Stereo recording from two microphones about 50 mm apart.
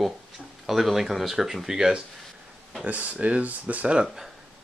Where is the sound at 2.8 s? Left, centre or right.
Right.